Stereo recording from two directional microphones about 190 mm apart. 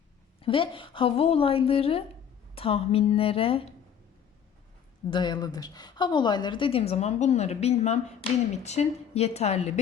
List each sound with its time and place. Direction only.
0.4 s a woman's voice: 25° left (ahead or behind)
5.1 s a woman's voice: 25° left (ahead or behind)